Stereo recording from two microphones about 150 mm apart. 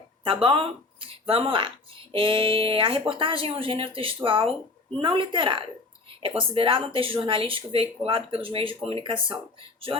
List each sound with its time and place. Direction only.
0.3 s speech: 35° right (ahead or behind)